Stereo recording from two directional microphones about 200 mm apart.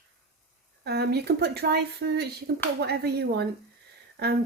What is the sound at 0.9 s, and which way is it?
Speech, 55° right (ahead or behind).